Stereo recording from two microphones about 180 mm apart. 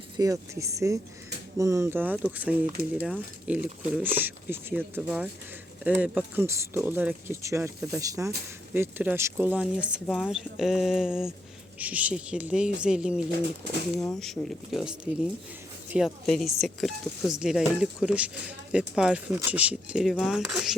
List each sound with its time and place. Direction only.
0.2 s speech: 15° right (ahead or behind); by 20.7 s centre (ahead or behind)